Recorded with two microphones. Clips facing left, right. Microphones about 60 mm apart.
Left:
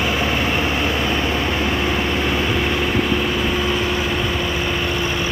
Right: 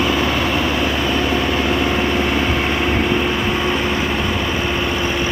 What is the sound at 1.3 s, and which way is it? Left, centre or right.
Vehicle, centre.